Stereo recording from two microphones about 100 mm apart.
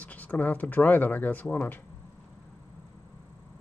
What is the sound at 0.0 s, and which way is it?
Speech, 15° left (ahead or behind).